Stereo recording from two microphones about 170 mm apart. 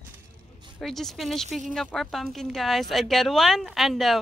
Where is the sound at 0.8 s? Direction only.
Centre (ahead or behind).